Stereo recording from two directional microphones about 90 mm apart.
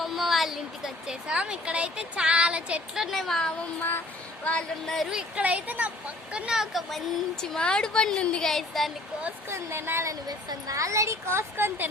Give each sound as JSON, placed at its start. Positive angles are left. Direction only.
{"t": 0.0, "sound": "a woman's voice", "side_deg": 0}
{"t": 3.8, "sound": "a sound", "side_deg": 20}
{"t": 4.4, "sound": "a woman's voice", "side_deg": 10}
{"t": 5.4, "sound": "a woman's voice", "side_deg": -15}
{"t": 7.4, "sound": "a woman's voice", "side_deg": 10}
{"t": 9.5, "sound": "a woman's voice", "side_deg": -25}
{"t": 10.1, "sound": "a woman's voice", "side_deg": -45}